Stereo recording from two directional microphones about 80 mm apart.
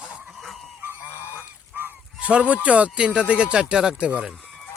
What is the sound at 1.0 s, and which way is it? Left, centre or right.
Goose, left.